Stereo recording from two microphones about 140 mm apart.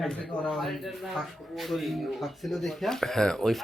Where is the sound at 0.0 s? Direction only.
Centre (ahead or behind).